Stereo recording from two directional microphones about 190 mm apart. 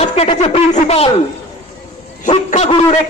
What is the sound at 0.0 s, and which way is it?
Speech, 30° left (ahead or behind).